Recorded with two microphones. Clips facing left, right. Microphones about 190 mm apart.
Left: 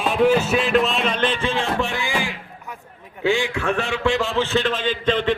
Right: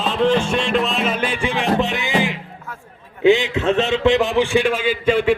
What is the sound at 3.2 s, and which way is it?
A man's voice, 20° right (ahead or behind).